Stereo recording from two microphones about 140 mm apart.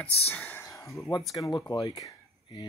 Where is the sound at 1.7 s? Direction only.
30° left (ahead or behind).